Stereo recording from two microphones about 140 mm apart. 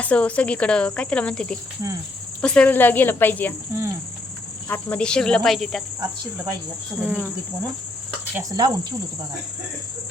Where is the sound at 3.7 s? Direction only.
20° right (ahead or behind).